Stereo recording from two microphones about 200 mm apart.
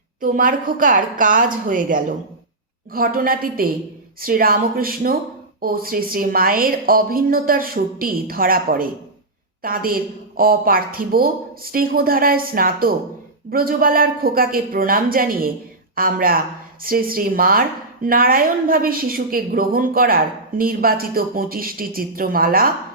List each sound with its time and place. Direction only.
0.2 s speech: 40° right (ahead or behind)